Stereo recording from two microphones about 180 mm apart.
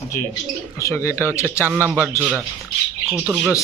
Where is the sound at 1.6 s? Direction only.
10° right (ahead or behind).